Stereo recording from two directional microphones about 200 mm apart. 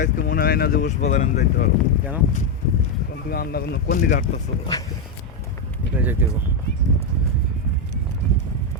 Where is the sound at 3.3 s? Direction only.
50° left (ahead or behind).